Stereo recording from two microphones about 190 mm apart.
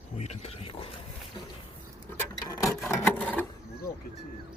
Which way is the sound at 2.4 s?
20° left (ahead or behind).